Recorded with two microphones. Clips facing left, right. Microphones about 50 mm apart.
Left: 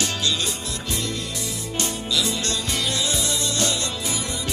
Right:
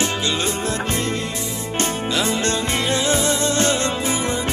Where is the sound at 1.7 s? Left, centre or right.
Right.